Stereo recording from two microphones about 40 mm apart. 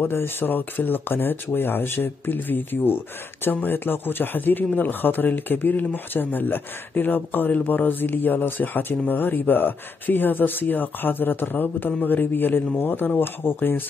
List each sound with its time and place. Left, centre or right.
0.0 s speech: left
13.4 s speech: left